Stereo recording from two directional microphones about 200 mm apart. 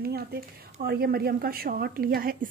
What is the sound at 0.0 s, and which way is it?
A woman's voice, 50° right (ahead or behind).